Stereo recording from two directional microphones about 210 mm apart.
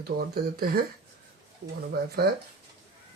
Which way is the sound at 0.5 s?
45° right (ahead or behind).